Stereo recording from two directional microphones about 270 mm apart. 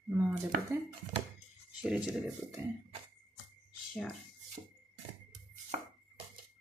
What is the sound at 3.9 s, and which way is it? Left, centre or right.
Speech, centre.